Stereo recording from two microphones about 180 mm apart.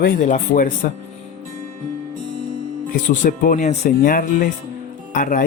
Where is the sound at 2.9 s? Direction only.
50° left (ahead or behind).